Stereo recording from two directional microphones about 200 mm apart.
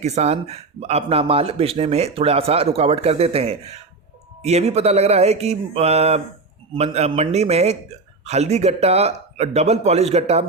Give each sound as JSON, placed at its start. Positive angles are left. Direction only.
{"t": 0.0, "sound": "speech", "side_deg": -35}